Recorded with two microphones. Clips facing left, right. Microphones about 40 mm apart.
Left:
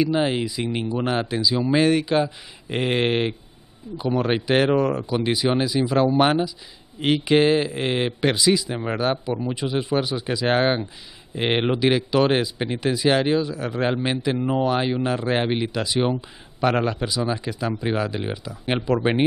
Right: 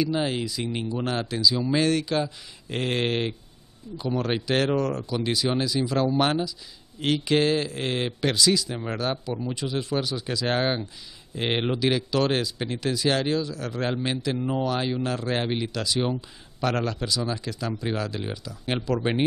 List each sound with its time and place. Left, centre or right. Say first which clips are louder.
0.0 s speech: left 4 dB; left